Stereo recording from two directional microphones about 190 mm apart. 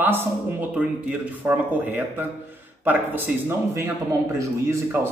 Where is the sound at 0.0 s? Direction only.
10° right (ahead or behind).